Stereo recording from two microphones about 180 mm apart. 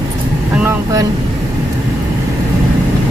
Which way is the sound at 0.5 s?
10° right (ahead or behind).